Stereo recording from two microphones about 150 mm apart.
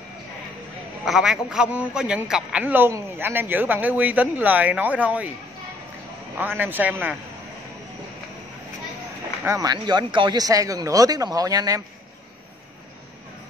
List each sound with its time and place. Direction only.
1.0 s a man's voice: centre (ahead or behind)
6.3 s a man's voice: 10° right (ahead or behind)
9.4 s speech: 20° right (ahead or behind)